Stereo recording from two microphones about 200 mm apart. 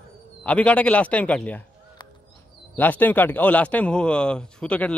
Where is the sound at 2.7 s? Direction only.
10° left (ahead or behind).